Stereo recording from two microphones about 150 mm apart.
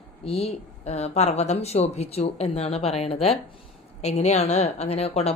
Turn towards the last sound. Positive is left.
turn(degrees=45)  # may be behind; listen again after turning